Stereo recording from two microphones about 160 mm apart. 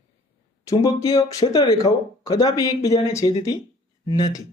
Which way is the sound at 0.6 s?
20° left (ahead or behind).